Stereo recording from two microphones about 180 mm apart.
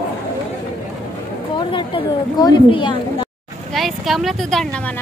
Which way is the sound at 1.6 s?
25° left (ahead or behind).